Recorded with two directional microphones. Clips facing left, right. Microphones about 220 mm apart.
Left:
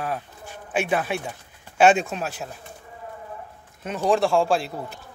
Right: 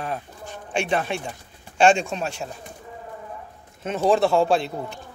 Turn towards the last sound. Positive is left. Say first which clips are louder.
# right 2 dB
turn(degrees=0)  # may be behind; listen again after turning